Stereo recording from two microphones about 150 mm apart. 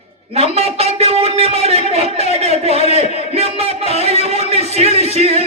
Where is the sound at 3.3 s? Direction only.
40° right (ahead or behind).